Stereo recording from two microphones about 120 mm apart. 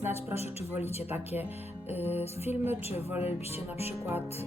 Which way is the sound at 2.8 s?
60° left (ahead or behind).